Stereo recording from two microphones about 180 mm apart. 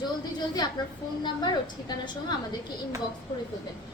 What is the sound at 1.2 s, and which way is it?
A woman's voice, 25° left (ahead or behind).